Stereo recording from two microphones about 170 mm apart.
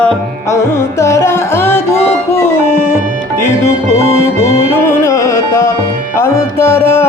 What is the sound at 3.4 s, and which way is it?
Music, 15° left (ahead or behind).